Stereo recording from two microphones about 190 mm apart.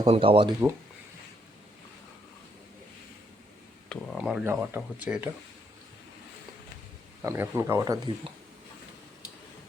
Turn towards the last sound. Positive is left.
turn(degrees=-15)  # may be behind; listen again after turning